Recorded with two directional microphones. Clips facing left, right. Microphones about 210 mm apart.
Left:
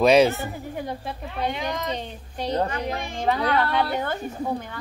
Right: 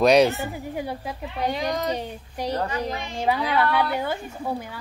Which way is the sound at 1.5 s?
35° right (ahead or behind).